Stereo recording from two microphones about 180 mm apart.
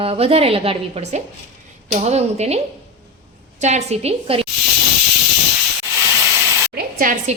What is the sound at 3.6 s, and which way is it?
Speech, 40° right (ahead or behind).